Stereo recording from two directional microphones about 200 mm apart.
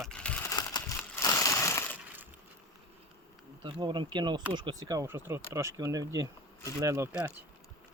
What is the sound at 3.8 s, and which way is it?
Speech, 25° right (ahead or behind).